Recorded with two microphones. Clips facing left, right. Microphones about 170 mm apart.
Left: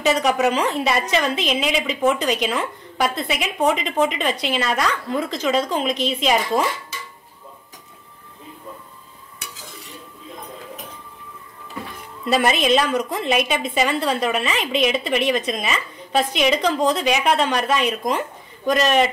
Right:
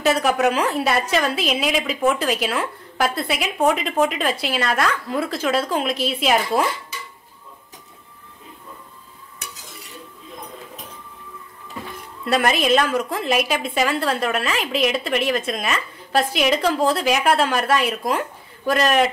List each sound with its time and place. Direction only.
0.0 s a woman's voice: centre (ahead or behind)
12.3 s a woman's voice: centre (ahead or behind)